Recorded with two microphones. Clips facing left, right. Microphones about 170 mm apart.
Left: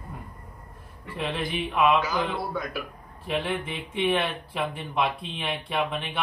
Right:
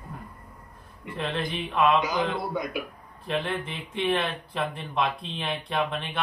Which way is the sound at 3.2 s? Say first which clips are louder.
Left 1 dB; 5° left (ahead or behind).